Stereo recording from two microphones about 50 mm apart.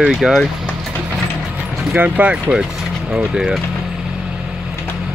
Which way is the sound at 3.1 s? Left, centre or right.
Centre.